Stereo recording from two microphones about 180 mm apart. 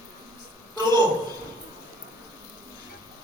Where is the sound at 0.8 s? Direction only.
25° right (ahead or behind).